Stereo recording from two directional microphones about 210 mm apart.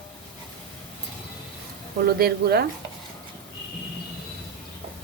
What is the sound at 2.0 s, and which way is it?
Speech, 50° right (ahead or behind).